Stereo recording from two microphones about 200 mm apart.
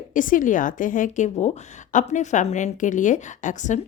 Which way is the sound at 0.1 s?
40° left (ahead or behind).